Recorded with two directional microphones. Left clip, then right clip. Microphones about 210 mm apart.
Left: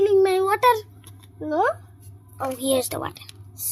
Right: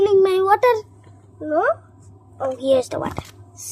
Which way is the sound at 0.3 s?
25° left (ahead or behind).